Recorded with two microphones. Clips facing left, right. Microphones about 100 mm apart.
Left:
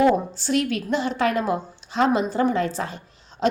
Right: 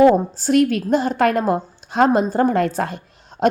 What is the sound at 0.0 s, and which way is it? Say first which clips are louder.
A woman's voice: right 6 dB; 45° right (ahead or behind).